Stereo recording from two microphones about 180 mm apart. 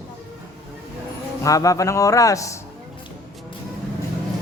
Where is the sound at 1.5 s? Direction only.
20° left (ahead or behind).